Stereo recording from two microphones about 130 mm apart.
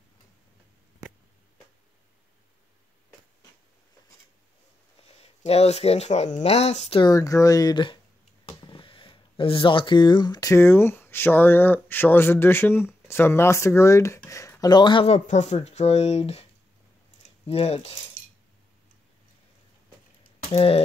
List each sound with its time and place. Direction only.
5.0 s speech: 50° left (ahead or behind)
7.0 s speech: 25° left (ahead or behind)
14.6 s speech: 35° left (ahead or behind)
15.0 s speech: 60° left (ahead or behind)
17.2 s a sound: 50° left (ahead or behind)
20.5 s speech: 50° left (ahead or behind)